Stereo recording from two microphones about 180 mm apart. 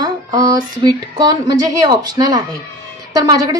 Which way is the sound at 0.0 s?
20° right (ahead or behind).